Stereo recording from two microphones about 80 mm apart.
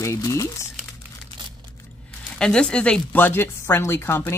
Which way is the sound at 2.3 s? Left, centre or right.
Centre.